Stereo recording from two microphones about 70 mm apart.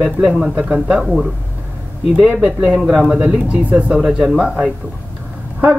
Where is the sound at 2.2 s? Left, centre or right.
Centre.